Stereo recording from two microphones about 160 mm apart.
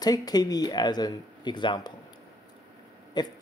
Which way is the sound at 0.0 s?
25° left (ahead or behind).